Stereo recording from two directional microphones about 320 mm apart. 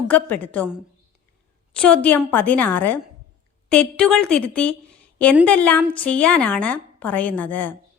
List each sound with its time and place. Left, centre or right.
0.1 s a woman's voice: centre